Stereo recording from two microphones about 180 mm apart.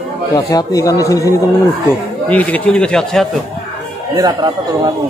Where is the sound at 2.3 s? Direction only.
5° left (ahead or behind).